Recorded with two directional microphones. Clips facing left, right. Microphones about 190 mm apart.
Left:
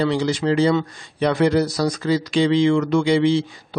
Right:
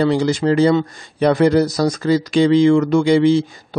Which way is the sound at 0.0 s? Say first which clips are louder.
Right 4 dB; 45° right (ahead or behind).